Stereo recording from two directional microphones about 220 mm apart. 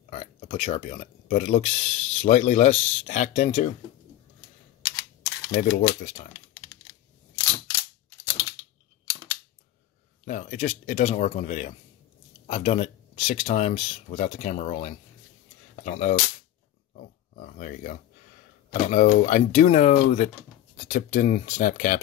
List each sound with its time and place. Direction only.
0.1 s speech: 25° left (ahead or behind)
5.5 s speech: 40° left (ahead or behind)
10.2 s speech: 35° left (ahead or behind)
16.9 s pig: 35° left (ahead or behind)
18.7 s speech: 40° left (ahead or behind)